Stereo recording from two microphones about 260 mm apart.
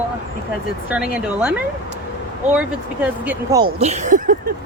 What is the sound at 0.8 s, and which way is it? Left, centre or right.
Speech, centre.